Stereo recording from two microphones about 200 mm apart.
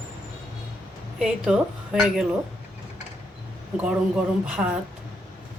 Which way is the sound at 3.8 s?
5° right (ahead or behind).